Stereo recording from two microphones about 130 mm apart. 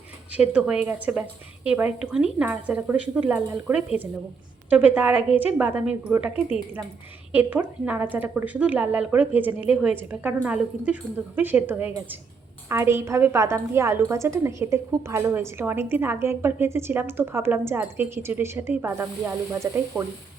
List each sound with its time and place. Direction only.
0.3 s a woman's voice: 10° right (ahead or behind)